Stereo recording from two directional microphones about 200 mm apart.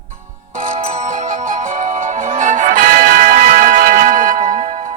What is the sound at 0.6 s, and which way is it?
Music, 40° right (ahead or behind).